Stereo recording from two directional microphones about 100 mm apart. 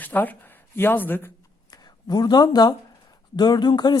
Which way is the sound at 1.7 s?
40° left (ahead or behind).